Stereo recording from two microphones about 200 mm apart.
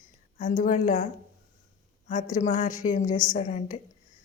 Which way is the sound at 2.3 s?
35° left (ahead or behind).